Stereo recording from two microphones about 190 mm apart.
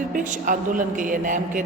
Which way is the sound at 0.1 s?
45° right (ahead or behind).